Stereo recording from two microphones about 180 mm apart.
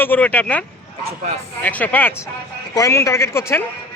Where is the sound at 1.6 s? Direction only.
10° left (ahead or behind).